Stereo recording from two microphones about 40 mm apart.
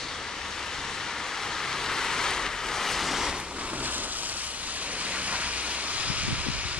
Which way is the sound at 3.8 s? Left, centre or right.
Right.